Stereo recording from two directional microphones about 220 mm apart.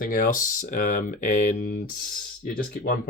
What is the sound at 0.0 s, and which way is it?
Speech, 40° left (ahead or behind).